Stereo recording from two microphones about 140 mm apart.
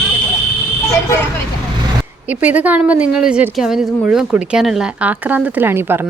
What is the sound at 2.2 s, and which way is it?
Speech, 10° right (ahead or behind).